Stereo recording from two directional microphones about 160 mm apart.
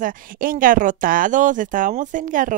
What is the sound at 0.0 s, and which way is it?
Speech, 60° right (ahead or behind).